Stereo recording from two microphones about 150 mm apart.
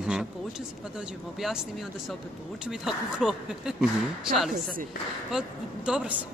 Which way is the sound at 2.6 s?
5° right (ahead or behind).